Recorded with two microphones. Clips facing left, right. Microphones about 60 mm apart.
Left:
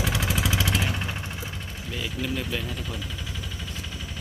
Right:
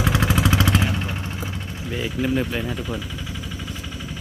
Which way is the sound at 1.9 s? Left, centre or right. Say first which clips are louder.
Right 8 dB; right.